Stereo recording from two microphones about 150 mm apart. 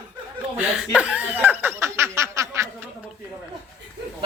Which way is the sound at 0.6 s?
10° right (ahead or behind).